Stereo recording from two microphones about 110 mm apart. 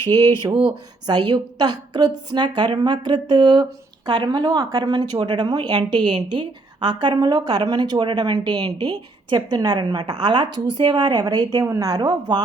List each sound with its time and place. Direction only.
0.1 s a woman's voice: 40° right (ahead or behind)